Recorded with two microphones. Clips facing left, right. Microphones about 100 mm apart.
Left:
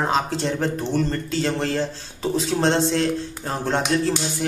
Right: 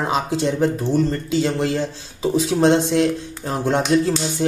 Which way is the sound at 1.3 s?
10° right (ahead or behind).